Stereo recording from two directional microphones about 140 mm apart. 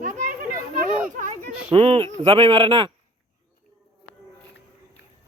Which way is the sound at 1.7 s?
40° right (ahead or behind).